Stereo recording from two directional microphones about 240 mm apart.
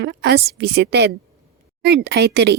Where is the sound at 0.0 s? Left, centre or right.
Right.